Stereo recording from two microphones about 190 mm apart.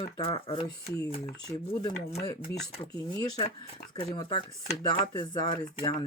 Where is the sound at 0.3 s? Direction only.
30° left (ahead or behind).